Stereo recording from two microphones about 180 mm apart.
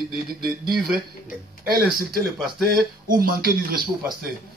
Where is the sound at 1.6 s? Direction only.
55° right (ahead or behind).